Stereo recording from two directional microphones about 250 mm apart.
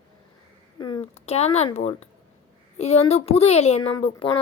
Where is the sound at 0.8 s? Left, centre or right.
Centre.